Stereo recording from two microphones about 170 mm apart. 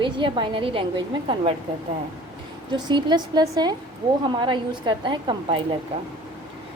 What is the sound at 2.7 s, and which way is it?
A woman's voice, 25° right (ahead or behind).